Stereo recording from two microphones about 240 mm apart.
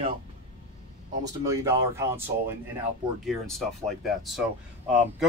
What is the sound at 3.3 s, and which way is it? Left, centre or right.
Speech, centre.